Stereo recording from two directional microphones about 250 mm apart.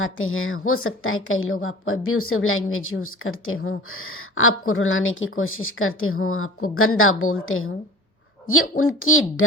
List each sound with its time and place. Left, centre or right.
0.0 s a woman's voice: left
8.7 s a woman's voice: left